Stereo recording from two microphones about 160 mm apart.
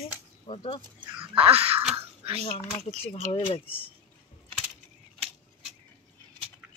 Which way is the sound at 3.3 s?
35° left (ahead or behind).